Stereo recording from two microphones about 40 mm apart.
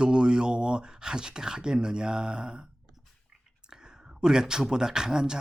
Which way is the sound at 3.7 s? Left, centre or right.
Centre.